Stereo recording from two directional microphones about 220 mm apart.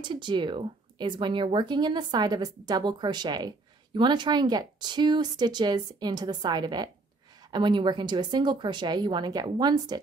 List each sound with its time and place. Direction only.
0.0 s speech: 20° right (ahead or behind)